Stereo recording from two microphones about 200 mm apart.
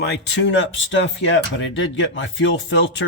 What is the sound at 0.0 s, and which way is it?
Speech, 60° left (ahead or behind).